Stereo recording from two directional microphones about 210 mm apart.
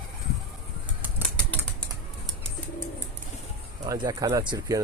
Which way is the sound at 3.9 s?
15° right (ahead or behind).